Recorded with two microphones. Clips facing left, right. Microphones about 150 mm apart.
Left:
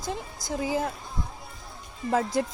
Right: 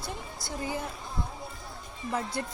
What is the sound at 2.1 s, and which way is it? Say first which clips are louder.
Speech: left 7 dB; 90° left.